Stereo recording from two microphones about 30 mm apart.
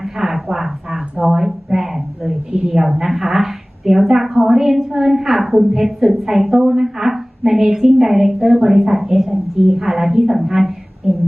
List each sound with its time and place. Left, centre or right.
0.0 s a woman's voice: centre
2.5 s a woman's voice: right
3.1 s a woman's voice: centre